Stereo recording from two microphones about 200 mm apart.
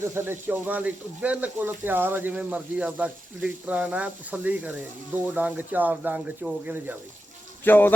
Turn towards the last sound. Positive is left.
turn(degrees=10)  # may be behind; listen again after turning